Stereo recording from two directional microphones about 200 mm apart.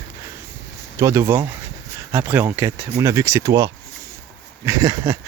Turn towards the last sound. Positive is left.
turn(degrees=-15)  # may be behind; listen again after turning